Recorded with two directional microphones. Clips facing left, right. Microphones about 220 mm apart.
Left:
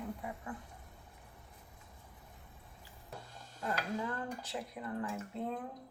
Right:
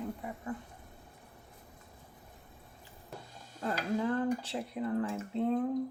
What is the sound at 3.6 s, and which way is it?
Speech, 30° right (ahead or behind).